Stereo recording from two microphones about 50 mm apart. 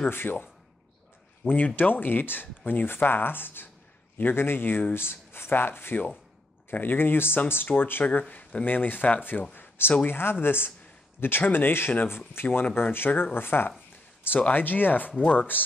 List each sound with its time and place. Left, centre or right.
0.1 s speech: left
9.6 s a sound: left
10.0 s speech: left